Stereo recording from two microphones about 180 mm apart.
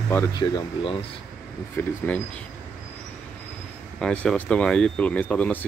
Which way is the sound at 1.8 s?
15° left (ahead or behind).